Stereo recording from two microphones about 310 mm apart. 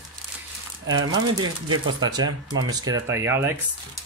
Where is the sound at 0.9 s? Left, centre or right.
Centre.